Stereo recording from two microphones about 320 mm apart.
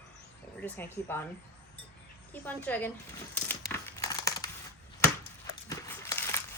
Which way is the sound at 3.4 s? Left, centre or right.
Centre.